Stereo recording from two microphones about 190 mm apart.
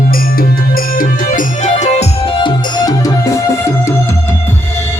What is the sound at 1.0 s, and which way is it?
Music, 40° left (ahead or behind).